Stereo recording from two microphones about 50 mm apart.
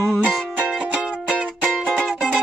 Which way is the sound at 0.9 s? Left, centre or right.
Right.